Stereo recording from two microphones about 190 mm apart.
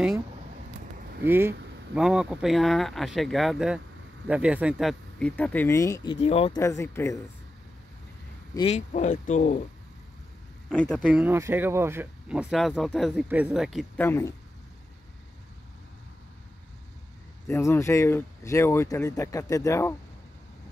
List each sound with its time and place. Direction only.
1.2 s speech: 10° right (ahead or behind); by 6.1 s 15° left (ahead or behind)
6.2 s speech: 30° left (ahead or behind)
6.5 s speech: 15° left (ahead or behind)
8.5 s speech: 35° left (ahead or behind)
10.7 s speech: 5° left (ahead or behind)
11.1 s speech: 10° right (ahead or behind)
14.0 s speech: 15° left (ahead or behind)
17.5 s speech: 15° left (ahead or behind)